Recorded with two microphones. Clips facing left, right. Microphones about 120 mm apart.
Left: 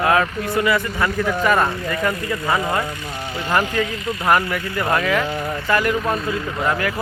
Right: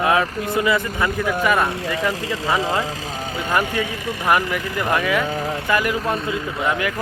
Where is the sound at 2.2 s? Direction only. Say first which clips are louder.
Left 1 dB; 90° right.